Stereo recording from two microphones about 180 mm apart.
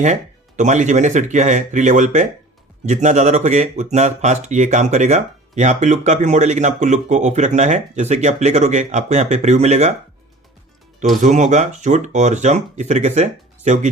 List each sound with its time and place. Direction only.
0.0 s speech: 40° right (ahead or behind)
11.2 s speech: 40° right (ahead or behind)